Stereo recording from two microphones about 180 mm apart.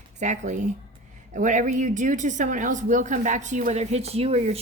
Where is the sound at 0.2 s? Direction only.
40° right (ahead or behind).